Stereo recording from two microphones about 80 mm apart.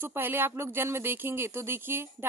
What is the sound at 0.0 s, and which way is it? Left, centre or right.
A woman's voice, right.